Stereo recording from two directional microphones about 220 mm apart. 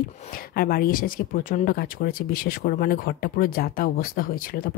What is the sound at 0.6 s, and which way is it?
Speech, 40° left (ahead or behind).